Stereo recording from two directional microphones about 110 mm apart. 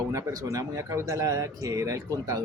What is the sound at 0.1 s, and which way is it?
Speech, 30° right (ahead or behind).